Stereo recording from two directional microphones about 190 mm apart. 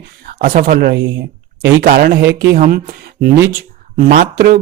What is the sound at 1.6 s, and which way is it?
Speech, 15° right (ahead or behind).